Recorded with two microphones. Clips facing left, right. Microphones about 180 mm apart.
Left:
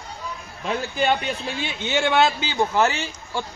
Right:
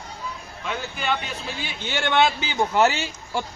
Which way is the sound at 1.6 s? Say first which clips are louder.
Left 7 dB; 20° left (ahead or behind).